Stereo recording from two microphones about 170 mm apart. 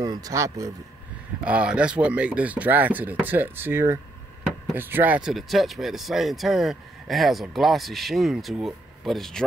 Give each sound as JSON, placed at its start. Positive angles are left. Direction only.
{"t": 0.0, "sound": "speech", "side_deg": -20}
{"t": 1.4, "sound": "speech", "side_deg": -5}